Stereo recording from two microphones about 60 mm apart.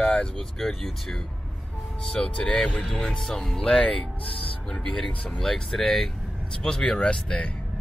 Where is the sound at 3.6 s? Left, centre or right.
Left.